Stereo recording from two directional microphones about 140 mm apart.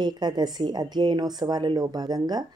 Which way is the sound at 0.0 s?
30° right (ahead or behind).